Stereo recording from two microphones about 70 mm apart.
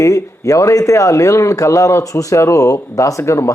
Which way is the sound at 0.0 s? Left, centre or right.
Left.